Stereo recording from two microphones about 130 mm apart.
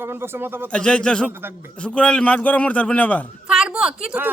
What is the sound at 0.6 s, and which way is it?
Speech, 10° left (ahead or behind).